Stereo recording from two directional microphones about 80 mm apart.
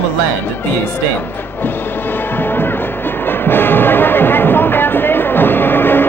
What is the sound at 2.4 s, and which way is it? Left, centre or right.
Music, left.